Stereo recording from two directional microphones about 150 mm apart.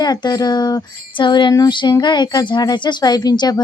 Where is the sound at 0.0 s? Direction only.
25° left (ahead or behind).